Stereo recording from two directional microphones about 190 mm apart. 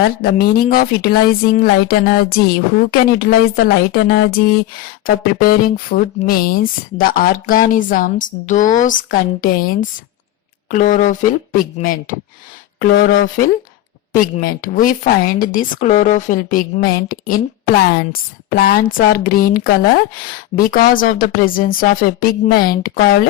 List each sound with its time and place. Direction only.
0.2 s speech: 55° left (ahead or behind)